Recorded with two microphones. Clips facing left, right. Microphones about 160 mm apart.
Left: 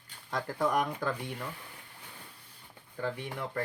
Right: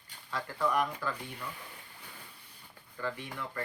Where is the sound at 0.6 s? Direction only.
60° left (ahead or behind).